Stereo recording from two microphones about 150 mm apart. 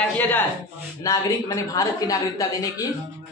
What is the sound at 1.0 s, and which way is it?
A woman's voice, 20° left (ahead or behind).